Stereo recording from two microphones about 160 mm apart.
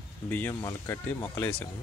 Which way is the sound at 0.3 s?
10° left (ahead or behind).